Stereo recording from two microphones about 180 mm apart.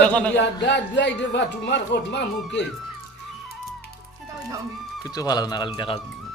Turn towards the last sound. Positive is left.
turn(degrees=30)  # may be behind; listen again after turning